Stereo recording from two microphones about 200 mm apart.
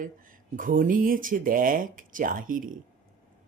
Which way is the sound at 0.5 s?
40° right (ahead or behind).